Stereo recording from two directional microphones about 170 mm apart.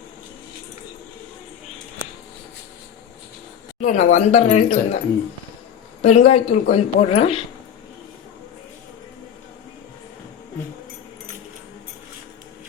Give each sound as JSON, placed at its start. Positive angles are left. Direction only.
{"t": 3.8, "sound": "speech", "side_deg": 45}
{"t": 6.0, "sound": "a woman's voice", "side_deg": 40}